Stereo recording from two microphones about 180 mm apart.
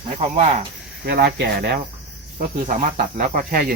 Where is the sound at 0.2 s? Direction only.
40° right (ahead or behind).